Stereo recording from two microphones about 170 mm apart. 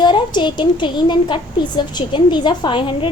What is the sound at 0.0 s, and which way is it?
A woman's voice, 25° left (ahead or behind).